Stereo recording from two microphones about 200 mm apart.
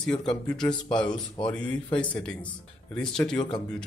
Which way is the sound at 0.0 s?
5° left (ahead or behind).